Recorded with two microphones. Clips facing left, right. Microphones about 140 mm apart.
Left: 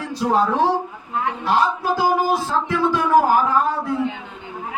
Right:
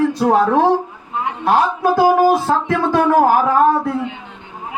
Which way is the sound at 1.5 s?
55° right (ahead or behind).